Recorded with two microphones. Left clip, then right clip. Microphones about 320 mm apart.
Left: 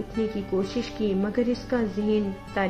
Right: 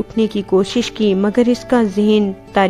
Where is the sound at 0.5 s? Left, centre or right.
Right.